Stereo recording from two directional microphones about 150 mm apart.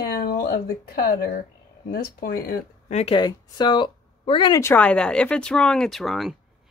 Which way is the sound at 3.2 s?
30° left (ahead or behind).